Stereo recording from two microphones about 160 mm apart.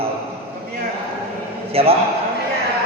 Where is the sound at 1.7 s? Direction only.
35° right (ahead or behind).